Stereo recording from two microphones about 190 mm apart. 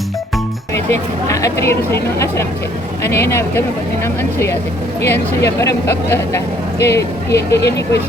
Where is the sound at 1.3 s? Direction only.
15° left (ahead or behind).